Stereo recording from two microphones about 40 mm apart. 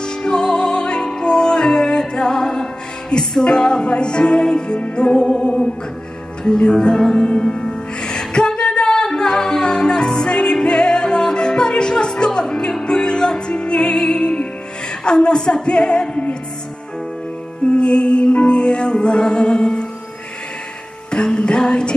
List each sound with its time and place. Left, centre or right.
0.0 s music: left
15.0 s female singing: centre
17.6 s music: left
21.1 s music: left